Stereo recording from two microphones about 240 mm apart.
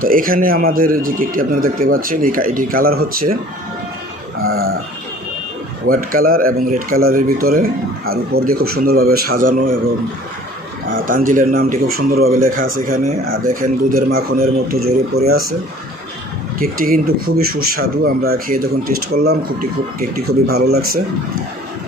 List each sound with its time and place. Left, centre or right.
0.0 s speech: right
4.4 s speech: right
5.8 s speech: right
10.9 s speech: right
16.6 s speech: right